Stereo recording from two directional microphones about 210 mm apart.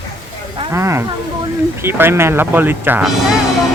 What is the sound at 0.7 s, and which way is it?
Speech, 15° right (ahead or behind).